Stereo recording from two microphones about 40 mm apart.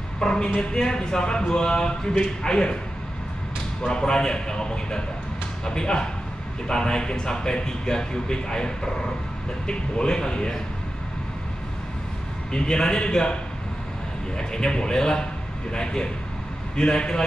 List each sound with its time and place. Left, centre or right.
0.2 s speech: centre
3.8 s speech: left
12.5 s speech: left